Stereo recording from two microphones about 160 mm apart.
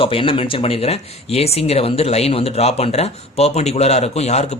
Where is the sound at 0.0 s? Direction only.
35° left (ahead or behind).